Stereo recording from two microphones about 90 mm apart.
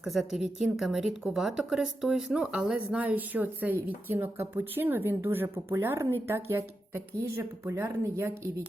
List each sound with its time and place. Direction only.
0.0 s a woman's voice: 5° right (ahead or behind); by 8.6 s 30° right (ahead or behind)